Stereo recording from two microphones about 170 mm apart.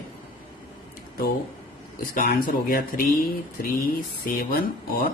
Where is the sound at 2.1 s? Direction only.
60° left (ahead or behind).